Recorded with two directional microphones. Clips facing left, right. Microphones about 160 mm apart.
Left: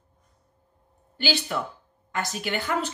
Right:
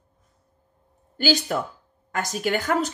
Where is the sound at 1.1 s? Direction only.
45° right (ahead or behind).